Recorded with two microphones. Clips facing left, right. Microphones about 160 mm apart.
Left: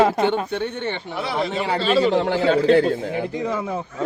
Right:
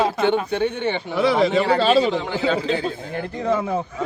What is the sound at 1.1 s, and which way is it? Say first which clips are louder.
Speech: right 8 dB; 90° right.